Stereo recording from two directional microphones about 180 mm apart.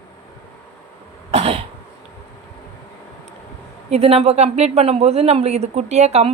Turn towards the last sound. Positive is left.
turn(degrees=-40)  # may be behind; listen again after turning